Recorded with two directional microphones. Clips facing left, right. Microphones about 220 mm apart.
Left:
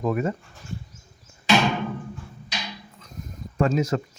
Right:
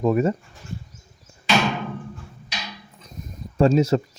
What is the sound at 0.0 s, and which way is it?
Speech, 30° right (ahead or behind).